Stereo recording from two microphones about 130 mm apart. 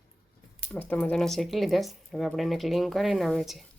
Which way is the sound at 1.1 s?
Centre (ahead or behind).